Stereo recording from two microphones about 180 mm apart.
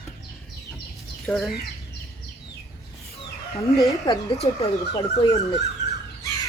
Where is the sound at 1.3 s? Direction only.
15° left (ahead or behind).